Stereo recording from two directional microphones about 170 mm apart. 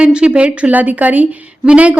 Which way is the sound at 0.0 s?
5° right (ahead or behind).